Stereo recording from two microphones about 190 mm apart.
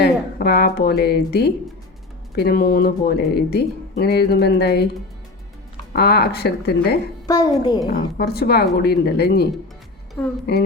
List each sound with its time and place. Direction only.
0.0 s a woman's voice: 55° left (ahead or behind)
5.9 s speech: 55° left (ahead or behind)
7.3 s a child's voice: 20° left (ahead or behind)
7.9 s speech: 55° left (ahead or behind)
10.5 s speech: 55° left (ahead or behind)